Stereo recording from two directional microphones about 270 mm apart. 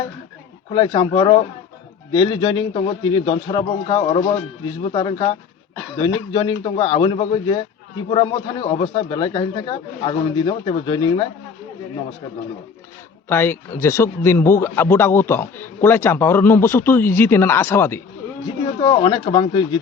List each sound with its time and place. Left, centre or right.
0.7 s a man's voice: centre
13.2 s a man's voice: centre
18.8 s a man's voice: centre